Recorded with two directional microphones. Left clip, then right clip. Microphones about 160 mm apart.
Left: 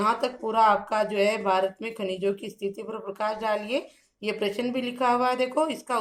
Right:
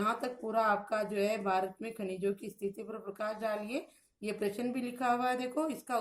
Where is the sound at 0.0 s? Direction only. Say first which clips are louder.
Left 9 dB; 30° right (ahead or behind).